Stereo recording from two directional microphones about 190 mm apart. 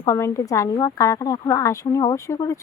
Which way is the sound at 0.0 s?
15° left (ahead or behind).